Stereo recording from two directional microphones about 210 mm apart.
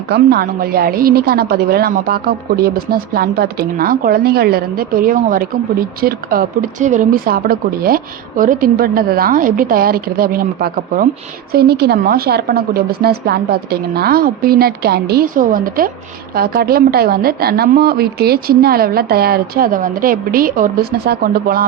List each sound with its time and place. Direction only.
0.1 s a woman's voice: 45° right (ahead or behind)